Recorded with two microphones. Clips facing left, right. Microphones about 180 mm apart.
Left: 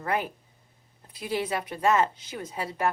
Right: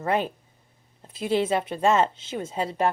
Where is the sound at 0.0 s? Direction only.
25° right (ahead or behind).